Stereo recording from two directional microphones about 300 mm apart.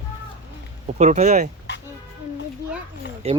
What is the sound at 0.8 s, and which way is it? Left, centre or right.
Speech, right.